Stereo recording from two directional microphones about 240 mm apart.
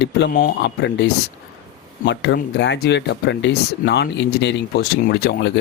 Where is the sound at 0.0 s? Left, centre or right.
Left.